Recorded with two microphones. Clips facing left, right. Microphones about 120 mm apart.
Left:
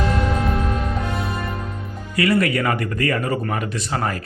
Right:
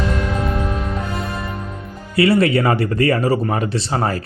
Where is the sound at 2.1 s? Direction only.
30° right (ahead or behind).